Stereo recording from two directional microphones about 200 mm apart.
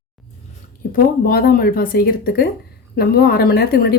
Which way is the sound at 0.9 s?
50° left (ahead or behind).